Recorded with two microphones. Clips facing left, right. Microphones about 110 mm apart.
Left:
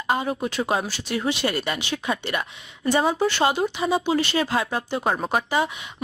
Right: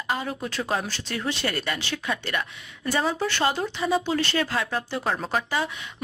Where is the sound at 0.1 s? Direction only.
20° left (ahead or behind).